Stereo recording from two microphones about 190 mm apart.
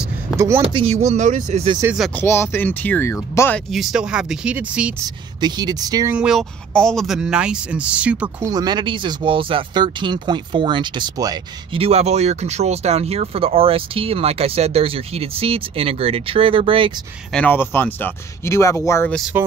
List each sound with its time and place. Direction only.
0.6 s speech: 30° right (ahead or behind)
2.0 s speech: 10° left (ahead or behind)
3.7 s speech: centre (ahead or behind)
5.4 s speech: 20° right (ahead or behind)
6.1 s speech: centre (ahead or behind); by 16.9 s 30° right (ahead or behind)
17.3 s speech: 10° left (ahead or behind)